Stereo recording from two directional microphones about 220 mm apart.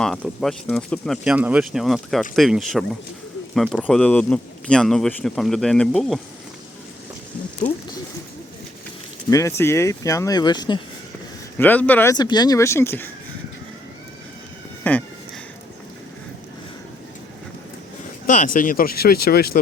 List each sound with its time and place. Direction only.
0.0 s speech: centre (ahead or behind)
7.6 s a sound: 35° left (ahead or behind)
9.3 s speech: 15° left (ahead or behind)
11.5 s speech: 10° left (ahead or behind)
14.8 s a sound: 10° left (ahead or behind)
18.3 s speech: 35° left (ahead or behind)